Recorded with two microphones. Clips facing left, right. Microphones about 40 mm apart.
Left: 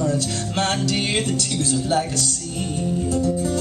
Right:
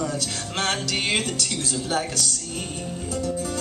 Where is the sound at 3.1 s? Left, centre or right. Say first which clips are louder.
Left 3 dB; left.